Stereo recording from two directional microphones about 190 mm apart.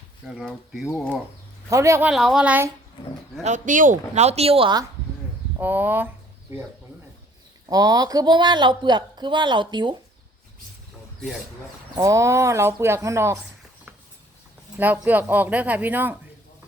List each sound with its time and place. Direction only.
0.3 s speech: centre (ahead or behind)
1.7 s speech: 15° right (ahead or behind)
3.4 s speech: 40° right (ahead or behind); by 4.9 s 25° right (ahead or behind)
5.5 s speech: 10° right (ahead or behind)
7.7 s speech: 20° right (ahead or behind)
11.9 s speech: 15° right (ahead or behind)
14.8 s speech: 10° right (ahead or behind)